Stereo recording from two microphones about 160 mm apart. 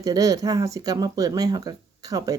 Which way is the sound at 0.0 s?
20° right (ahead or behind).